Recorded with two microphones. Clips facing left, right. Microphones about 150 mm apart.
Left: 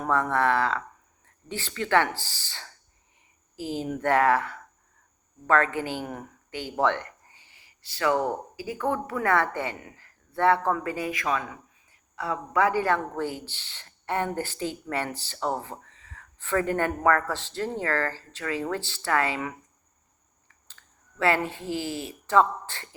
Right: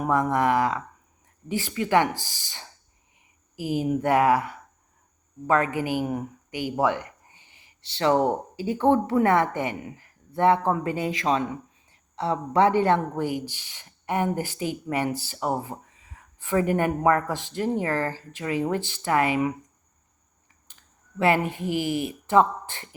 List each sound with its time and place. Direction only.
0.0 s speech: 15° right (ahead or behind)
21.2 s speech: 15° right (ahead or behind)